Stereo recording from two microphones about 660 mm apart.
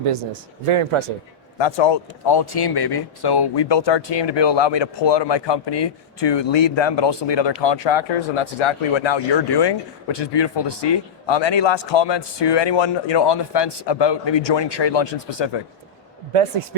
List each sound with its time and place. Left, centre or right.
0.7 s a man's voice: right
1.5 s speech: left
16.3 s a man's voice: right